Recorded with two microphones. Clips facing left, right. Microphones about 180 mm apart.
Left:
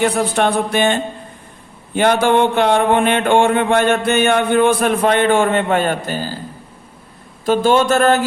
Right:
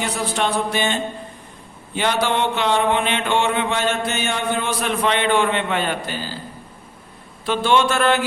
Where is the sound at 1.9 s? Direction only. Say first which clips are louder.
Left 7 dB; 50° left (ahead or behind).